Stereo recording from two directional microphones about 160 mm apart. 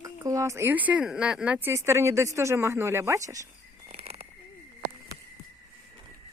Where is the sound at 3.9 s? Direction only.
40° right (ahead or behind).